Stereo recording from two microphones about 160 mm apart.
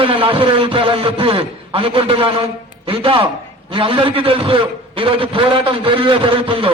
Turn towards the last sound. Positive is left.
turn(degrees=-35)  # may be behind; listen again after turning